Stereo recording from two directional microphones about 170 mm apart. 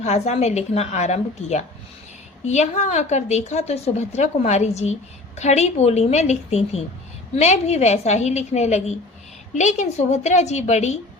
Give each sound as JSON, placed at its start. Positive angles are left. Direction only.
{"t": 0.0, "sound": "a woman's voice", "side_deg": 40}